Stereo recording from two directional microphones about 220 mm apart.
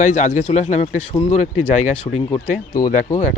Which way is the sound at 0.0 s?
30° left (ahead or behind).